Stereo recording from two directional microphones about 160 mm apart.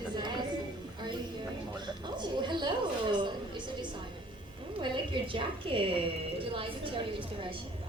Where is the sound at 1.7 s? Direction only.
30° right (ahead or behind).